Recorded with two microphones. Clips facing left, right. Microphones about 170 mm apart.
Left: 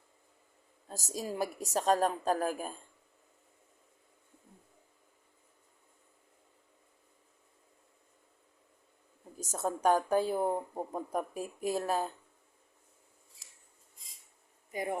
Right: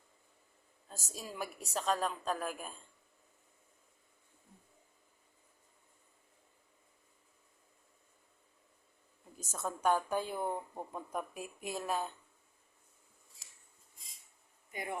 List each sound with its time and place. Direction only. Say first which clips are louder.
0.9 s a woman's voice: left 8 dB; 40° left (ahead or behind)
9.4 s a woman's voice: left 4 dB; 40° left (ahead or behind)
14.7 s speech: left 6 dB; 35° left (ahead or behind)